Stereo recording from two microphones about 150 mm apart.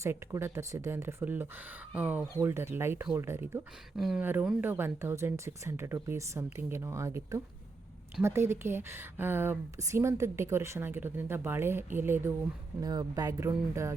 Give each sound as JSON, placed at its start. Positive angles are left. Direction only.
{"t": 0.0, "sound": "a woman's voice", "side_deg": -15}
{"t": 3.9, "sound": "speech", "side_deg": 0}
{"t": 4.2, "sound": "a woman's voice", "side_deg": -10}
{"t": 12.8, "sound": "speech", "side_deg": -25}